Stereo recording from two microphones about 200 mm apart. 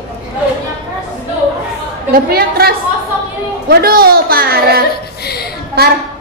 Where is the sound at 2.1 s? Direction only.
50° right (ahead or behind).